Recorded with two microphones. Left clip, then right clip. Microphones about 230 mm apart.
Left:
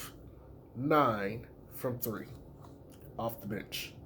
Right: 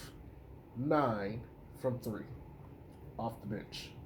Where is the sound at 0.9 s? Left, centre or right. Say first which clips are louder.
Left 4 dB; left.